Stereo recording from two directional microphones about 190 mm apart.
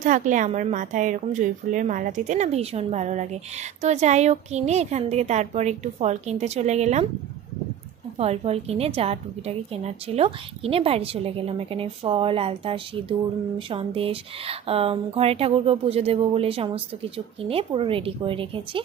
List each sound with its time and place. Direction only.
0.0 s a woman's voice: 40° right (ahead or behind)
8.2 s a woman's voice: 35° right (ahead or behind)